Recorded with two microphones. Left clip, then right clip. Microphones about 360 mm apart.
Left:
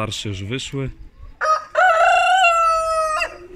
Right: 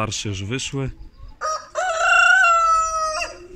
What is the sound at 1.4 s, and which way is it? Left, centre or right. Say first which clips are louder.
Crowing: left 8 dB; left.